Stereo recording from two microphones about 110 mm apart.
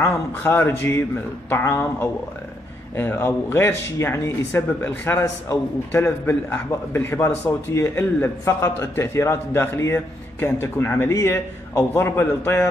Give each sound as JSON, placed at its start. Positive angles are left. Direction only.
{"t": 0.0, "sound": "a man's voice", "side_deg": 20}